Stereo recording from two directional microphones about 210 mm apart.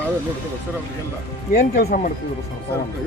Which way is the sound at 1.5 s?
40° left (ahead or behind).